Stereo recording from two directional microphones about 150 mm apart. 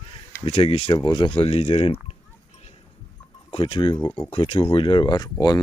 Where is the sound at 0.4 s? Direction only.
40° left (ahead or behind).